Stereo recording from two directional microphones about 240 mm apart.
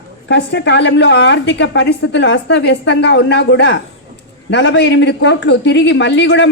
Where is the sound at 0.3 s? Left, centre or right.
Left.